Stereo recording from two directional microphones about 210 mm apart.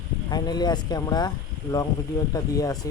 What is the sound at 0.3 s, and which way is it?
Speech, 20° left (ahead or behind).